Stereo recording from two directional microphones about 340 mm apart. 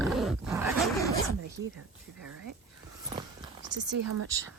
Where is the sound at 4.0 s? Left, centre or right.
Right.